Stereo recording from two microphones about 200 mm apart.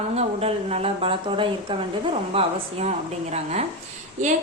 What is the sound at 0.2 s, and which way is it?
A woman's voice, 30° right (ahead or behind).